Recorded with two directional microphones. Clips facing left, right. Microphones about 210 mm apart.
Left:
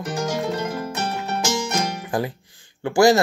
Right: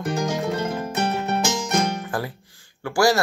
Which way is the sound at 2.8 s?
20° left (ahead or behind).